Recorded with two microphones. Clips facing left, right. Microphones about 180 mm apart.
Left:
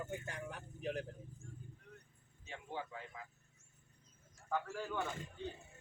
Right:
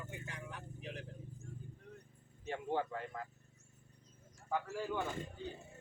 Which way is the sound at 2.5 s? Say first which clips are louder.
Right 8 dB; 60° right (ahead or behind).